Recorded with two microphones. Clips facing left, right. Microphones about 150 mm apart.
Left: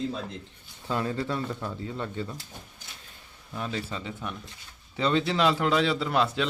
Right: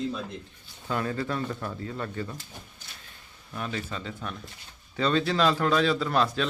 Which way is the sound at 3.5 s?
20° left (ahead or behind).